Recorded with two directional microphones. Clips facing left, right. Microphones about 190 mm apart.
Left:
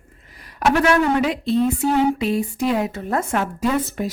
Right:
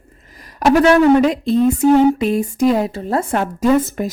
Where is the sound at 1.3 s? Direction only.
45° right (ahead or behind).